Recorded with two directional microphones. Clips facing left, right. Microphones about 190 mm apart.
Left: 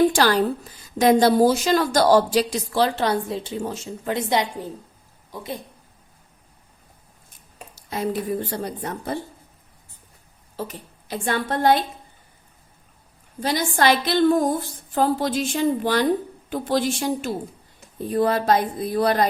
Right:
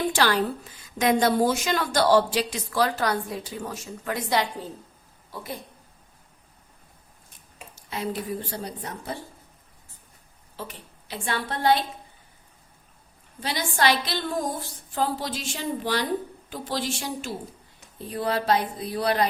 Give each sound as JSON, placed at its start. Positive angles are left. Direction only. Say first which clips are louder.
{"t": 0.1, "sound": "a woman's voice", "louder": "left 4 dB", "side_deg": 40}
{"t": 7.8, "sound": "a sound", "louder": "left 5 dB", "side_deg": 40}
{"t": 8.4, "sound": "speech", "louder": "left 6 dB", "side_deg": 55}
{"t": 10.6, "sound": "speech", "louder": "left 6 dB", "side_deg": 45}
{"t": 13.4, "sound": "speech", "louder": "left 4 dB", "side_deg": 45}